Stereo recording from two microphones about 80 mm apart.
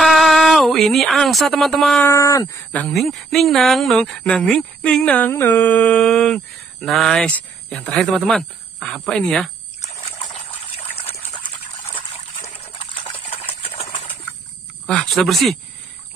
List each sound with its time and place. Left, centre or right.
0.0 s a sound: centre
2.0 s speech: left
2.9 s speech: centre
7.2 s speech: centre
8.0 s speech: centre
11.3 s water: left
15.0 s speech: centre